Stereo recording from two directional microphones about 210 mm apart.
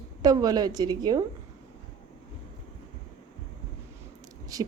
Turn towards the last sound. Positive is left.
turn(degrees=-15)  # may be behind; listen again after turning